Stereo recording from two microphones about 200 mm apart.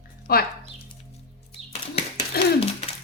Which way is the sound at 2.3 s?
50° left (ahead or behind).